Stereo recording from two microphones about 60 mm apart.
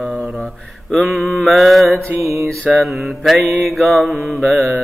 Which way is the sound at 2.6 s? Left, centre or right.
Centre.